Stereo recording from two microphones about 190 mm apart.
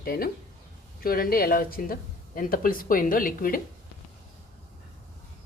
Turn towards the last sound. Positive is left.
turn(degrees=45)  # may be behind; listen again after turning